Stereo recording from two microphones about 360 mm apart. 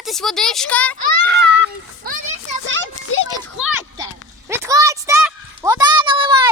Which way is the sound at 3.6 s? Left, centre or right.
Centre.